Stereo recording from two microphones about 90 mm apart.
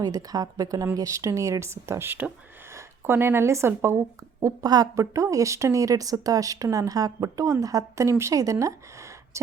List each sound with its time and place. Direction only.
0.0 s a woman's voice: 45° right (ahead or behind)
4.4 s speech: 45° right (ahead or behind)